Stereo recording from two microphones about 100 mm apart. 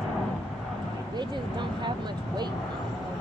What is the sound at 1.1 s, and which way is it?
Speech, 50° right (ahead or behind).